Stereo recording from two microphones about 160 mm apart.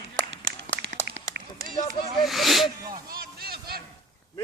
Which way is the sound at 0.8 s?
90° right.